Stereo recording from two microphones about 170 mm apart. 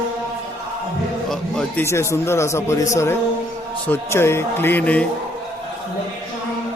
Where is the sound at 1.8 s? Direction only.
15° left (ahead or behind).